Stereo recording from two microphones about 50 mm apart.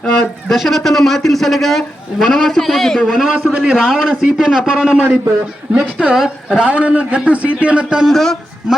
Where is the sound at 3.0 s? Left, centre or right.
Centre.